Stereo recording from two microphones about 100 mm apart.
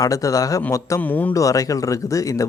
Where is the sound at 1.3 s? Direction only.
35° left (ahead or behind).